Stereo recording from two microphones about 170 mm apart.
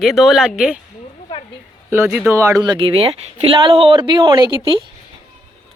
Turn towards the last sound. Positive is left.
turn(degrees=-30)  # may be behind; listen again after turning